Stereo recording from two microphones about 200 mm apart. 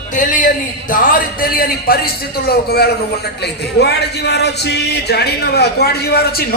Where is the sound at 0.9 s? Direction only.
45° left (ahead or behind).